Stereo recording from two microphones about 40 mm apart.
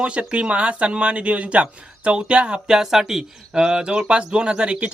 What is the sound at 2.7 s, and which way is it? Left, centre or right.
Speech, centre.